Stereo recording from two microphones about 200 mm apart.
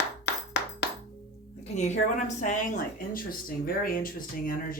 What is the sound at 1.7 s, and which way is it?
A woman's voice, 35° left (ahead or behind).